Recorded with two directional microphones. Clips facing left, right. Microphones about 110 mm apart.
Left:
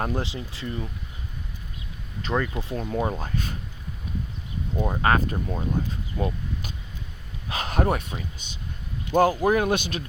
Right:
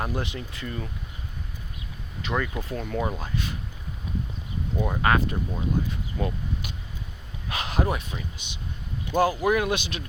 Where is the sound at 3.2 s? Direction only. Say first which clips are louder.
Left 1 dB; 45° left (ahead or behind).